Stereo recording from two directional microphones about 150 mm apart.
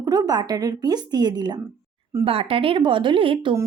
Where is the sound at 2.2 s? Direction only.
40° right (ahead or behind).